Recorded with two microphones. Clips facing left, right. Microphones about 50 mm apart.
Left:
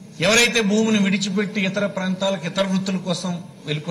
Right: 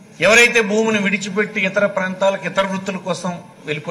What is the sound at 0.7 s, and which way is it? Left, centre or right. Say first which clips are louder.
Speech: right 2 dB; right.